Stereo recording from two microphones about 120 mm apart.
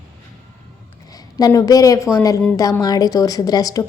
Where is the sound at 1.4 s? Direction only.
30° left (ahead or behind).